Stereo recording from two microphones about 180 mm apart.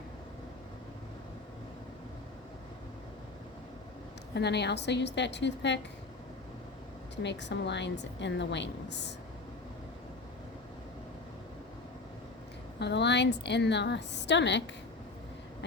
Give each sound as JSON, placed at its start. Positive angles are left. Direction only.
{"t": 4.4, "sound": "a woman's voice", "side_deg": 70}
{"t": 7.2, "sound": "a woman's voice", "side_deg": 75}
{"t": 12.8, "sound": "a woman's voice", "side_deg": 75}